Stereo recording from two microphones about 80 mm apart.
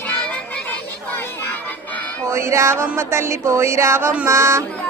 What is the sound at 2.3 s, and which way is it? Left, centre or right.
Music, right.